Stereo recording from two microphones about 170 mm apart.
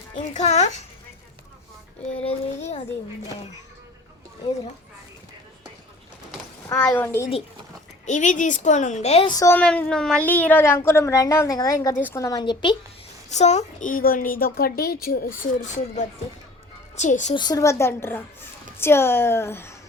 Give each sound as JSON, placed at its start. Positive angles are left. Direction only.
{"t": 0.3, "sound": "a child's voice", "side_deg": 40}
{"t": 2.2, "sound": "a child's voice", "side_deg": 40}
{"t": 6.7, "sound": "a woman's voice", "side_deg": 10}
{"t": 8.0, "sound": "a woman's voice", "side_deg": 45}
{"t": 9.2, "sound": "a woman's voice", "side_deg": 20}
{"t": 9.6, "sound": "a woman's voice", "side_deg": 5}
{"t": 13.3, "sound": "a woman's voice", "side_deg": 40}
{"t": 17.3, "sound": "a woman's voice", "side_deg": 25}